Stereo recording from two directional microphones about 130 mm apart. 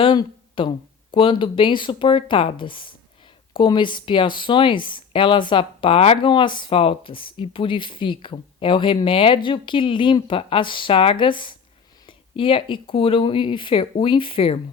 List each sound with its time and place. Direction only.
0.0 s a sound: 40° left (ahead or behind)
1.1 s speech: 40° left (ahead or behind)
6.3 s speech: 40° left (ahead or behind)